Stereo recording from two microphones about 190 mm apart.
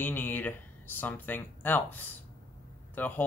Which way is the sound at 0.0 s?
10° left (ahead or behind).